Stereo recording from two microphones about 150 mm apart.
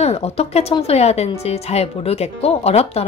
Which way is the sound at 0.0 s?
45° left (ahead or behind).